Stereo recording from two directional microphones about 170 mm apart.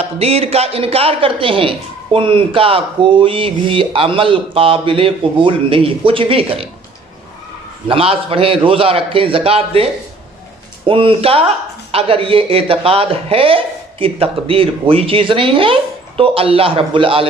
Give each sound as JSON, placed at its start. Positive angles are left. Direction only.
{"t": 0.0, "sound": "speech", "side_deg": -35}
{"t": 7.9, "sound": "speech", "side_deg": -35}
{"t": 10.9, "sound": "speech", "side_deg": -30}